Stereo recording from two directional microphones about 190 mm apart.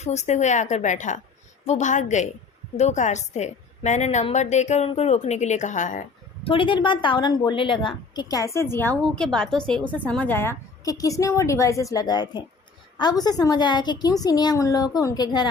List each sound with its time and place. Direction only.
0.0 s a woman's voice: 35° left (ahead or behind)
6.4 s a woman's voice: 25° left (ahead or behind)